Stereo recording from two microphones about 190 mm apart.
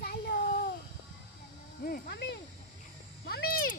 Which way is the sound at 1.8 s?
55° left (ahead or behind).